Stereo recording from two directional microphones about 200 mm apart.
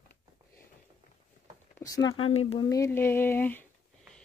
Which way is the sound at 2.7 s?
15° left (ahead or behind).